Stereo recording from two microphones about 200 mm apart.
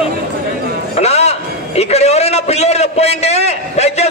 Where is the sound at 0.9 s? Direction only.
35° left (ahead or behind).